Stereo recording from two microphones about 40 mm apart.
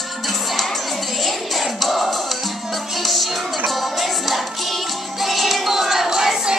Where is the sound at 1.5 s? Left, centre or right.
Centre.